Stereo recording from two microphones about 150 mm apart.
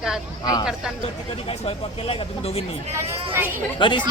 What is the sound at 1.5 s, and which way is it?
Speech, 40° left (ahead or behind).